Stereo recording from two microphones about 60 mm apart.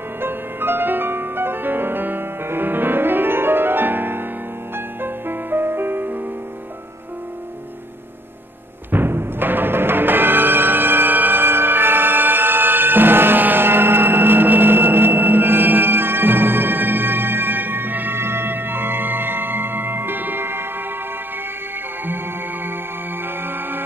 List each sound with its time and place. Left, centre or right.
0.2 s music: right
8.9 s music: right
23.2 s music: right